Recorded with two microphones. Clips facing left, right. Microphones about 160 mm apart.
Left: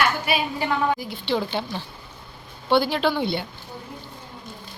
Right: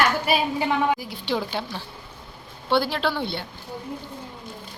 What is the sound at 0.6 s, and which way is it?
Speech, 20° right (ahead or behind).